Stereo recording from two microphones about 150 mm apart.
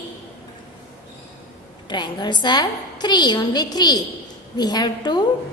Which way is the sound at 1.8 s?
30° left (ahead or behind).